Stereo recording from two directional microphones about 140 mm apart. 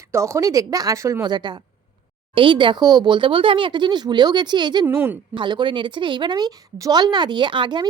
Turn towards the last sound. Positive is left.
turn(degrees=-35)  # may be behind; listen again after turning